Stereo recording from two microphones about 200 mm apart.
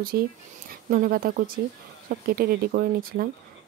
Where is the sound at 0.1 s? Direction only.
50° right (ahead or behind).